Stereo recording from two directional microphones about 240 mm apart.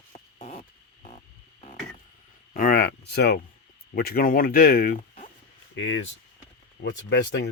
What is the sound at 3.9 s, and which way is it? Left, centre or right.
Speech, left.